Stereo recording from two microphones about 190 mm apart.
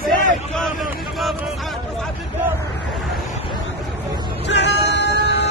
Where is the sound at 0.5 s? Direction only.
Centre (ahead or behind).